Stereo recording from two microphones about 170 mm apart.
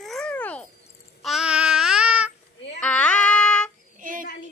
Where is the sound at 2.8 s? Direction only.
5° left (ahead or behind).